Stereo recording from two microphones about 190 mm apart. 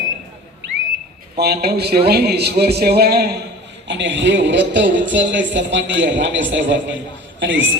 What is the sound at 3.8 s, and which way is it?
Speech, 70° right (ahead or behind).